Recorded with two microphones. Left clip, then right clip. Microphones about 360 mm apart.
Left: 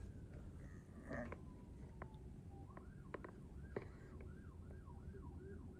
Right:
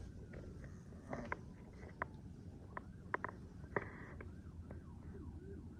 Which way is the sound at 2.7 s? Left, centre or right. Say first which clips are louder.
Right 11 dB; right.